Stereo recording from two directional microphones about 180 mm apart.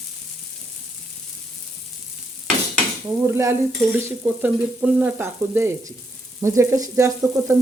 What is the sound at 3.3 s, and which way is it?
Stir, 15° right (ahead or behind).